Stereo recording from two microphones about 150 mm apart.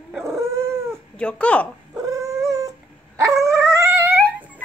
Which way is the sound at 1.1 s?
5° left (ahead or behind).